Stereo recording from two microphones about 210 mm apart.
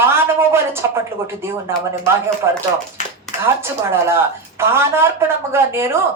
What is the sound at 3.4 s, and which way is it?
Speech, 10° right (ahead or behind).